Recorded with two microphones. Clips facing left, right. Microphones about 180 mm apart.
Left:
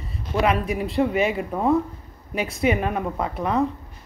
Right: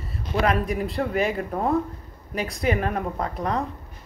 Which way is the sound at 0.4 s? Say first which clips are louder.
Left 1 dB; 5° left (ahead or behind).